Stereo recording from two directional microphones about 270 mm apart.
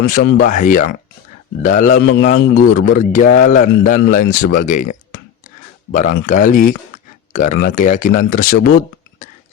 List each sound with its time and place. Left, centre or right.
0.3 s a man's voice: left
2.7 s a man's voice: left